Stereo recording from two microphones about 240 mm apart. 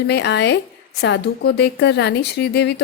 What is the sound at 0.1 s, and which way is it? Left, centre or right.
Speech, left.